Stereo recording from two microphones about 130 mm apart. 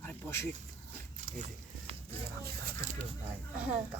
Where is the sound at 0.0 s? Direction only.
20° left (ahead or behind).